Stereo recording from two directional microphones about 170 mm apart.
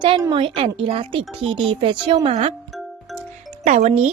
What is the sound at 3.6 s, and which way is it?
Speech, 40° right (ahead or behind).